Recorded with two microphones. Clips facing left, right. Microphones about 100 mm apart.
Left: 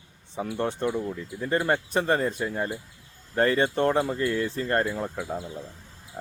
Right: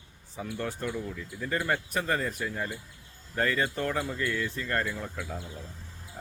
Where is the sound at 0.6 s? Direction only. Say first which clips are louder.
Left 7 dB; 30° left (ahead or behind).